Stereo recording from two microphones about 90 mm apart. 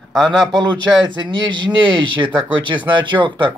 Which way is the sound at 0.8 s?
60° right (ahead or behind).